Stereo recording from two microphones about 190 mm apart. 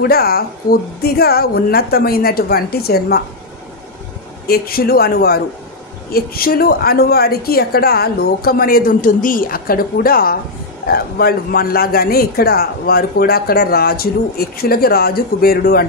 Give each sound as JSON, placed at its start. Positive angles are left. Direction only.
{"t": 0.0, "sound": "a man's voice", "side_deg": 55}
{"t": 4.5, "sound": "a man's voice", "side_deg": 50}